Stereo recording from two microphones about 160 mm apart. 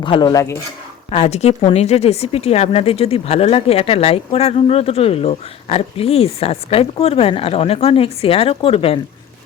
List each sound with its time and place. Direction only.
0.0 s speech: 30° left (ahead or behind)
1.1 s speech: 40° left (ahead or behind)